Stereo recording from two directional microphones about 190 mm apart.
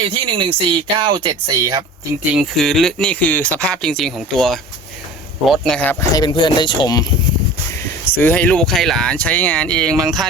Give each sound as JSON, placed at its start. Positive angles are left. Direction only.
{"t": 0.0, "sound": "speech", "side_deg": -25}
{"t": 2.3, "sound": "speech", "side_deg": 0}
{"t": 7.8, "sound": "speech", "side_deg": 10}